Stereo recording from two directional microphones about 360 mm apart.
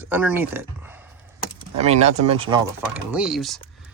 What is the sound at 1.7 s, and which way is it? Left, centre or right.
Speech, centre.